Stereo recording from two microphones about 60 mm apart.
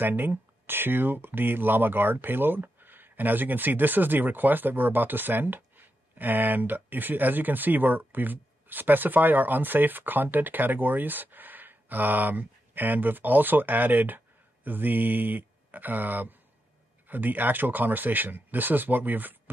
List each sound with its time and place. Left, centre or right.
0.0 s speech: right